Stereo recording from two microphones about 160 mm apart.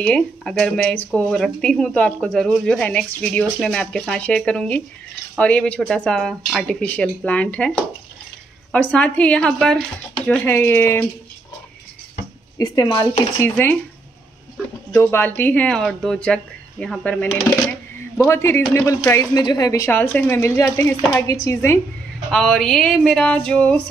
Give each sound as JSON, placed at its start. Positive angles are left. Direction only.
{"t": 0.0, "sound": "speech", "side_deg": 5}
{"t": 12.5, "sound": "speech", "side_deg": 20}
{"t": 13.4, "sound": "speech", "side_deg": 15}
{"t": 15.0, "sound": "speech", "side_deg": 15}
{"t": 22.3, "sound": "speech", "side_deg": 0}